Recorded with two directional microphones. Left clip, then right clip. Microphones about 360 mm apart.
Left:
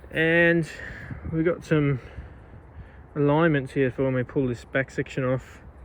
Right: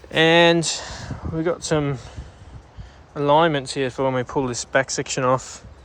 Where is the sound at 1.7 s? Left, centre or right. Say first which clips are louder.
Right 2 dB; right.